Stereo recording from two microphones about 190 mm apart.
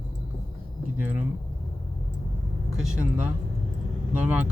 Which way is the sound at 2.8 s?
5° right (ahead or behind).